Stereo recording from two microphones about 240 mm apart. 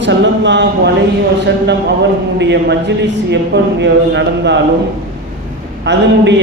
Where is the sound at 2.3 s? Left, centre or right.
Right.